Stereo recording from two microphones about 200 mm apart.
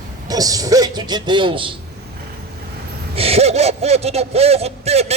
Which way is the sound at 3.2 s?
30° right (ahead or behind).